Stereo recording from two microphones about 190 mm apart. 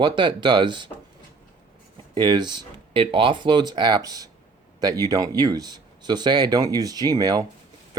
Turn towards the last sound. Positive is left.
turn(degrees=-20)  # may be behind; listen again after turning